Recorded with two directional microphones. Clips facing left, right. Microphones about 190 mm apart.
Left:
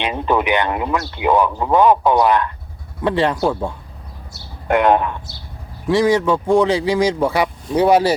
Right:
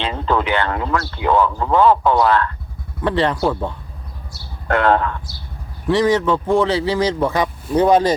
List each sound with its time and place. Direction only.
0.0 s speech: 15° left (ahead or behind)